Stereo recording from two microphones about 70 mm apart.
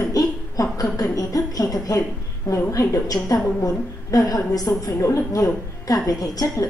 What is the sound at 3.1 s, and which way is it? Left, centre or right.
A woman's voice, left.